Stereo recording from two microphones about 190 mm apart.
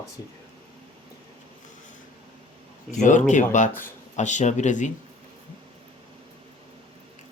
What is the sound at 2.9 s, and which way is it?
Speech, 40° left (ahead or behind).